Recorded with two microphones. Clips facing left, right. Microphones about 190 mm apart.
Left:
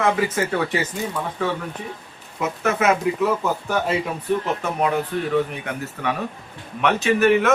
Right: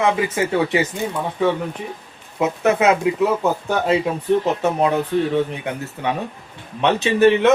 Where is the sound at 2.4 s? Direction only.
20° right (ahead or behind).